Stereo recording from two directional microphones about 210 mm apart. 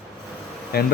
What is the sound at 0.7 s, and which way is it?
Speech, 50° left (ahead or behind).